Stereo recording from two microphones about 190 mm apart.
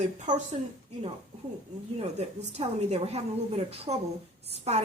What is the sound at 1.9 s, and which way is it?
A woman's voice, 35° right (ahead or behind).